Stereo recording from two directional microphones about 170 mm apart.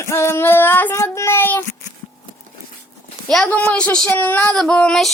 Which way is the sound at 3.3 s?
5° left (ahead or behind).